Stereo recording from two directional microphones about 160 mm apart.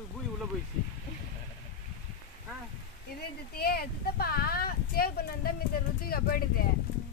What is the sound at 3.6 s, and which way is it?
Speech, 75° left (ahead or behind).